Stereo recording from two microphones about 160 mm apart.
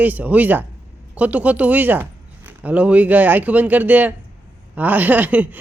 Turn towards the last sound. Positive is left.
turn(degrees=-10)  # may be behind; listen again after turning